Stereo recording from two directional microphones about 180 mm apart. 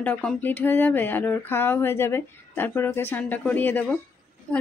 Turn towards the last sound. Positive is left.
turn(degrees=10)  # may be behind; listen again after turning